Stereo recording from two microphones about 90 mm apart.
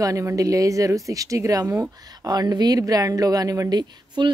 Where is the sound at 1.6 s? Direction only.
20° right (ahead or behind).